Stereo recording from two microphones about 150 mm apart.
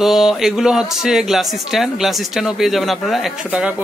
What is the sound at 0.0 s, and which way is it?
Speech, centre (ahead or behind).